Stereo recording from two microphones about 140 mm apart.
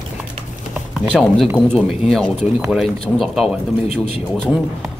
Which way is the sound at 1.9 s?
Centre (ahead or behind).